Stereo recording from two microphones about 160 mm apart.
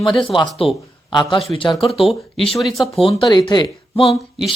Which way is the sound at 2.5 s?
Centre (ahead or behind).